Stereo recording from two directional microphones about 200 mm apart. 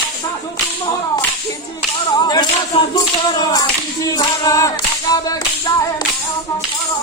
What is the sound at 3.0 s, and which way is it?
Singing, 20° left (ahead or behind).